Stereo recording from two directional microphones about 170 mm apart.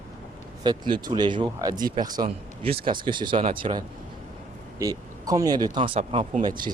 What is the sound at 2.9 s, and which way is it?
Speech, 30° right (ahead or behind).